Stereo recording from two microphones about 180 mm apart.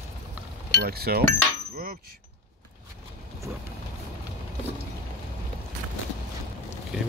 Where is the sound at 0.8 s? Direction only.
60° right (ahead or behind).